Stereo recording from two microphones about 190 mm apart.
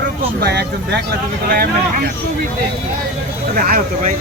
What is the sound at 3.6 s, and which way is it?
Speech, 50° right (ahead or behind).